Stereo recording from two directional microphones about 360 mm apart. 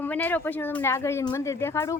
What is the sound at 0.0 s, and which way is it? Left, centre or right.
Speech, centre.